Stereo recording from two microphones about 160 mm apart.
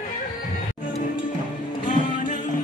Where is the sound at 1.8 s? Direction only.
50° left (ahead or behind).